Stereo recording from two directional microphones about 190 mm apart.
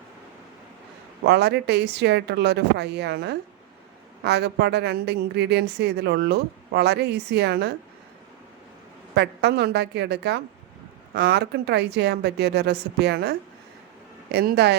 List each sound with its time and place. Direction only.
1.2 s a woman's voice: 60° right (ahead or behind)
9.1 s a woman's voice: 60° right (ahead or behind)